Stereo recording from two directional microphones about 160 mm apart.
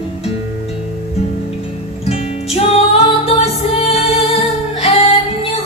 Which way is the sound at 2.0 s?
40° left (ahead or behind).